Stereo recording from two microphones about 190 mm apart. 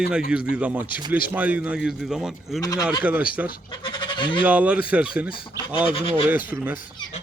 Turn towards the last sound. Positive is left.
turn(degrees=-10)  # may be behind; listen again after turning